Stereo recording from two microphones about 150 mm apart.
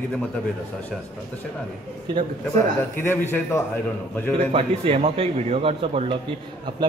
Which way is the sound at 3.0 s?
15° left (ahead or behind).